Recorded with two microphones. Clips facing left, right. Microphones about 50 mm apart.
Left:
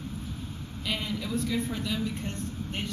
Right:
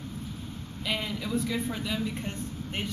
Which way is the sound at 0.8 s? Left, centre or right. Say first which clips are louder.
Even; centre.